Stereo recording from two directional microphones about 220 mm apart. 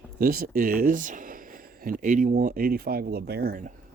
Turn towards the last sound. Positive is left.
turn(degrees=-40)  # may be behind; listen again after turning